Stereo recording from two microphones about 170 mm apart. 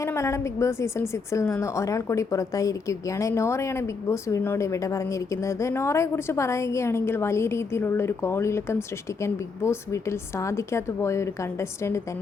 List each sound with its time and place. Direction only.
0.0 s a woman's voice: 15° left (ahead or behind)